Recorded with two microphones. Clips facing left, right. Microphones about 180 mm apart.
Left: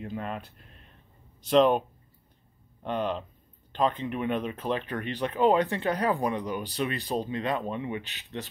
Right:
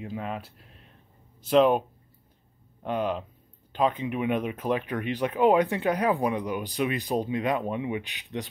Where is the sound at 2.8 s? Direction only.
5° right (ahead or behind).